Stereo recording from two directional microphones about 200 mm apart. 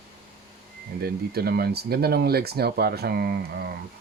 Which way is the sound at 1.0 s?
50° right (ahead or behind).